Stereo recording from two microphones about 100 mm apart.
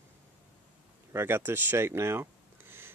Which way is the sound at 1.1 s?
25° right (ahead or behind).